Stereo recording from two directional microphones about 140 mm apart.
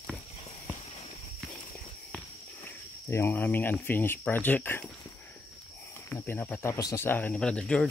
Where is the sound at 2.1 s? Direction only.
15° left (ahead or behind).